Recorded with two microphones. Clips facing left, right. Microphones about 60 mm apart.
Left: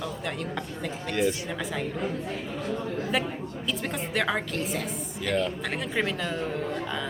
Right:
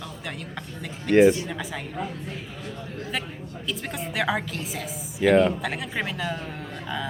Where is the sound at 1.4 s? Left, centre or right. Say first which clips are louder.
Left 2 dB; centre.